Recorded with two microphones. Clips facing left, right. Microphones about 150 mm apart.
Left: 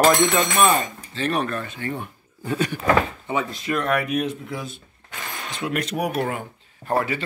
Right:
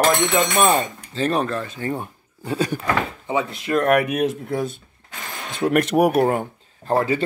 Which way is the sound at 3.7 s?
60° right (ahead or behind).